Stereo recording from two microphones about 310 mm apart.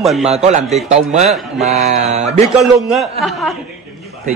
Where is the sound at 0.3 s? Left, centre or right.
Right.